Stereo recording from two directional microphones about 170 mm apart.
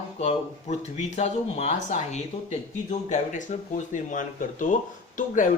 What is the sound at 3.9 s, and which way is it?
Speech, 50° left (ahead or behind).